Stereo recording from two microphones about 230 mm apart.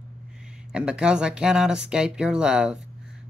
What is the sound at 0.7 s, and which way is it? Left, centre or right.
Speech, centre.